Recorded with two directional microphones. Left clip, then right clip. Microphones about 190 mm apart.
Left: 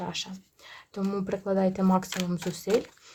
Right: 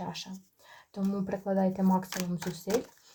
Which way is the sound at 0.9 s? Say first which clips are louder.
Left 3 dB; 35° left (ahead or behind).